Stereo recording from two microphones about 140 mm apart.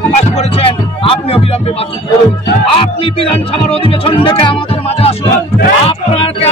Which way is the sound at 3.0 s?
40° left (ahead or behind).